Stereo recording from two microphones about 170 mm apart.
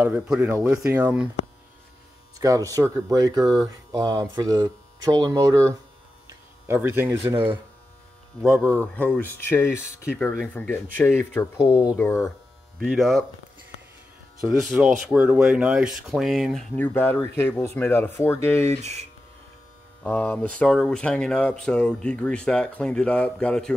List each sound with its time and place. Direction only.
0.0 s speech: 10° right (ahead or behind)
2.3 s speech: 20° right (ahead or behind)
8.8 s speech: 10° left (ahead or behind)
12.7 s speech: centre (ahead or behind)
14.4 s speech: centre (ahead or behind)
16.7 s speech: 10° left (ahead or behind)
20.0 s speech: 10° left (ahead or behind)